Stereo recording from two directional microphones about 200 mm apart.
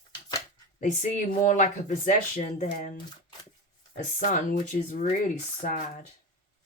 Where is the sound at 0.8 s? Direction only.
40° left (ahead or behind).